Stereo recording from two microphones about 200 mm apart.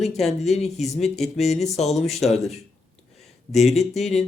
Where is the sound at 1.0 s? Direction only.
Centre (ahead or behind).